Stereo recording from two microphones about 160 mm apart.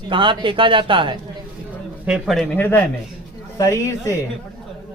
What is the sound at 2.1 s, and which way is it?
A man's voice, centre (ahead or behind).